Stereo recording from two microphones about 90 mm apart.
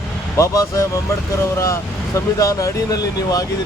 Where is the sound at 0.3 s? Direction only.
35° left (ahead or behind).